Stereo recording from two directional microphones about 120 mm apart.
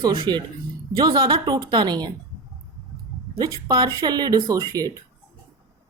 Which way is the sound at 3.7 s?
35° right (ahead or behind).